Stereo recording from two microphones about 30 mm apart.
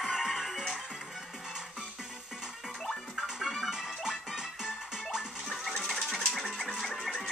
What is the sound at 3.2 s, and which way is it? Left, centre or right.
Music, centre.